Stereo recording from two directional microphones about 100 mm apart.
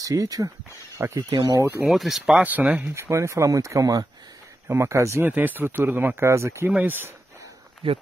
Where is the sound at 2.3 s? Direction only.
15° right (ahead or behind).